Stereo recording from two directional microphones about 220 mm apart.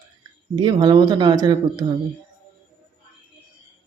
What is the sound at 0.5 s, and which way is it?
Speech, 20° right (ahead or behind).